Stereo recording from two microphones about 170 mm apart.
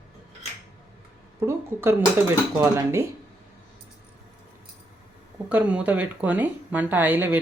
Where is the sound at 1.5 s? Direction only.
15° right (ahead or behind).